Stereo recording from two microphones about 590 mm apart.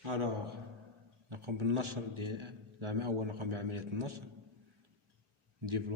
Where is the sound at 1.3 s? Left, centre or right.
Right.